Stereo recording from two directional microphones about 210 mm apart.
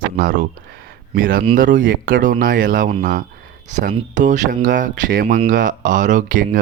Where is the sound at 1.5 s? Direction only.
40° right (ahead or behind).